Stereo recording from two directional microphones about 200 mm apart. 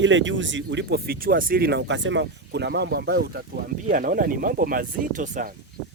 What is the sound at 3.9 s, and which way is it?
Speech, 45° right (ahead or behind).